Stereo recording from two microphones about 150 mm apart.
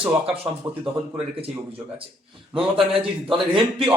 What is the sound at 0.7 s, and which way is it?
Speech, 20° right (ahead or behind).